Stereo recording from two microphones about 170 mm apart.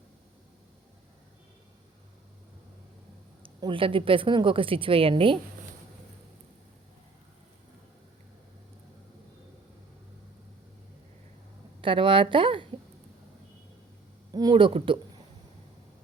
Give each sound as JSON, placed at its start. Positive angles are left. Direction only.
{"t": 3.4, "sound": "a woman's voice", "side_deg": -30}
{"t": 11.8, "sound": "speech", "side_deg": -30}
{"t": 14.3, "sound": "speech", "side_deg": -25}